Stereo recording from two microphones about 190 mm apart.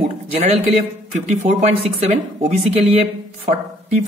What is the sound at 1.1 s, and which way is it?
Speech, 35° right (ahead or behind).